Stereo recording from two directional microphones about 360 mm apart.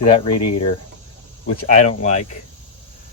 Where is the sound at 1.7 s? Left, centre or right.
Centre.